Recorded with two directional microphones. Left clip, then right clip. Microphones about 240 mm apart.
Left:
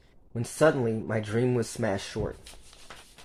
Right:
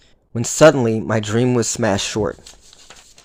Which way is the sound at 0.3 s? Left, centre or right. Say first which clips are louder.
Right 12 dB; right.